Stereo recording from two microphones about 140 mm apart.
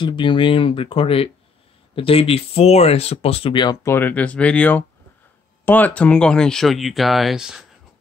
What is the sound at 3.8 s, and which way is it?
Speech, 15° left (ahead or behind).